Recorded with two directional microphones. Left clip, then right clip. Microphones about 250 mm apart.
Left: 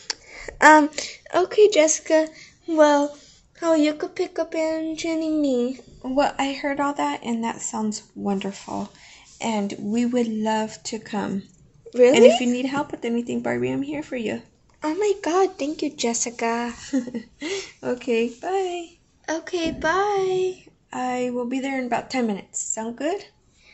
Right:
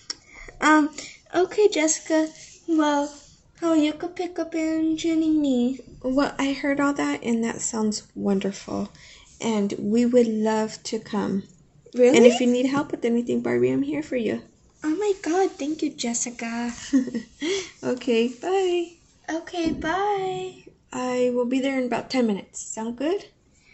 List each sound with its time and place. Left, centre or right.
0.1 s a woman's voice: left
6.0 s a woman's voice: centre
14.8 s speech: left
16.8 s a woman's voice: centre
19.2 s speech: left
20.9 s a woman's voice: centre